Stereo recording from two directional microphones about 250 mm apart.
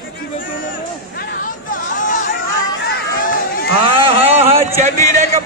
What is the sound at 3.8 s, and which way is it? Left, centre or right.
Vehicle, right.